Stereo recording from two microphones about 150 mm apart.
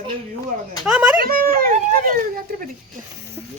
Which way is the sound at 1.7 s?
65° right (ahead or behind).